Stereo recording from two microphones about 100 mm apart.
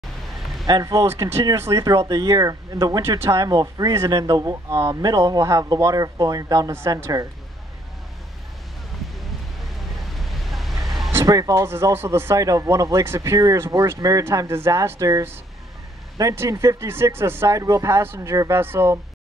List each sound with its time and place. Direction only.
0.7 s speech: 40° right (ahead or behind)
6.7 s speech: 25° right (ahead or behind)
9.2 s a sound: centre (ahead or behind)
11.2 s speech: 35° right (ahead or behind)